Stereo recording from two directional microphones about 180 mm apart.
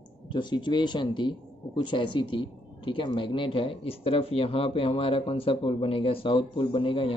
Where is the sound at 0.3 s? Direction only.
25° left (ahead or behind).